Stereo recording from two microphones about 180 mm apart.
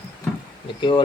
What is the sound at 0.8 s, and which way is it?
Speech, 25° left (ahead or behind).